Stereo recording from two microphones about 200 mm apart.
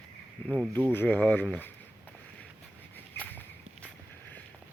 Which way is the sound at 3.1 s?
10° left (ahead or behind).